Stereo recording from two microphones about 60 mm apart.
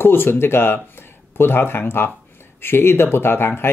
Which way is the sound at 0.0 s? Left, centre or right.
Left.